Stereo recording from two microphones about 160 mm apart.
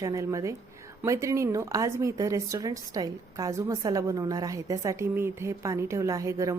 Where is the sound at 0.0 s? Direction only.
20° right (ahead or behind).